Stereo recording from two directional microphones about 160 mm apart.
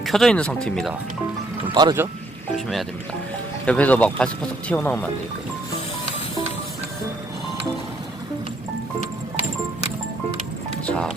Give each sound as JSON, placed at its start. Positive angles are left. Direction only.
{"t": 0.0, "sound": "speech", "side_deg": 0}
{"t": 1.7, "sound": "speech", "side_deg": -25}
{"t": 3.7, "sound": "speech", "side_deg": 10}
{"t": 10.8, "sound": "music", "side_deg": 5}